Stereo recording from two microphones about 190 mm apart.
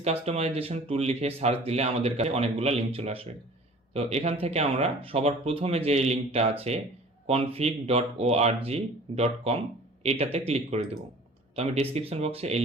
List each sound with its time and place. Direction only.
0.0 s a man's voice: 35° right (ahead or behind)